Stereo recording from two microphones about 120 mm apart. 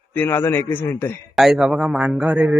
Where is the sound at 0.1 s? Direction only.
15° left (ahead or behind).